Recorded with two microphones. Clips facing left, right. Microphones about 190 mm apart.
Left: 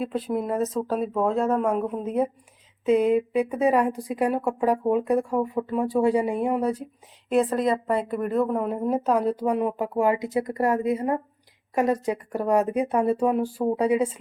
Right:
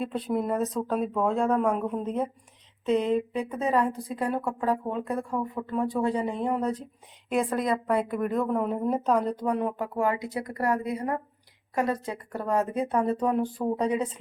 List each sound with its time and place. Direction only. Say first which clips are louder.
0.0 s a woman's voice: left 2 dB; centre (ahead or behind)